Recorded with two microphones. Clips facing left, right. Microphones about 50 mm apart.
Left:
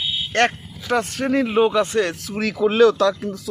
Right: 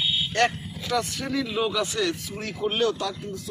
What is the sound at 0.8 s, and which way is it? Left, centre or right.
Speech, left.